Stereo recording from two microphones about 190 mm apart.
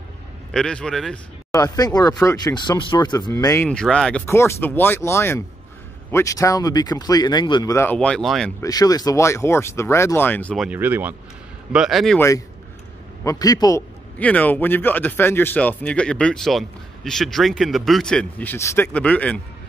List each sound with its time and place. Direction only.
0.5 s a man's voice: 5° left (ahead or behind)
1.5 s speech: 20° left (ahead or behind)
3.6 s a man's voice: 5° left (ahead or behind)
8.6 s a man's voice: 20° left (ahead or behind); by 12.2 s centre (ahead or behind)
13.2 s a man's voice: 20° left (ahead or behind)